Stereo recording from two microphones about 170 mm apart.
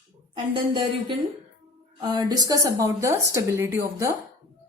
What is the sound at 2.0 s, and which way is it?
Speech, 25° right (ahead or behind).